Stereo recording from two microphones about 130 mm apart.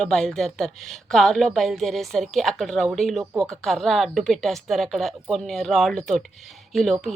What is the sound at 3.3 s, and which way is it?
Speech, 25° right (ahead or behind).